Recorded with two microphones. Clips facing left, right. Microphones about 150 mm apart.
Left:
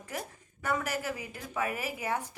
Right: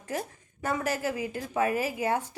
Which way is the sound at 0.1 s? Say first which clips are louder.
Right 6 dB; 30° right (ahead or behind).